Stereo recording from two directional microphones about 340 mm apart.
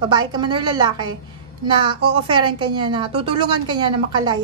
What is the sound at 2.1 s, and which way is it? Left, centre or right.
A woman's voice, centre.